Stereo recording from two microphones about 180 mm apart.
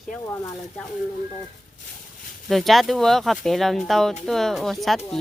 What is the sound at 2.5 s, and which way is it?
Speech, centre (ahead or behind).